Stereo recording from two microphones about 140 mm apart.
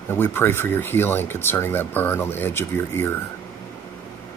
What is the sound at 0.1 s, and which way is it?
Speech, 15° left (ahead or behind).